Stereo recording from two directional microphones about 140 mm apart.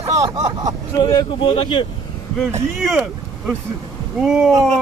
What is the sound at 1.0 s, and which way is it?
Speech, 35° left (ahead or behind).